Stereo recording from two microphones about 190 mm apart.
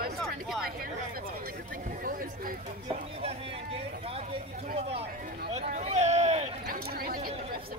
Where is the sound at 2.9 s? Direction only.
30° right (ahead or behind).